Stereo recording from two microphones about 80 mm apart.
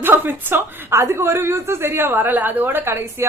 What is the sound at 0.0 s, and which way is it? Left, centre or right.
A woman's voice, right.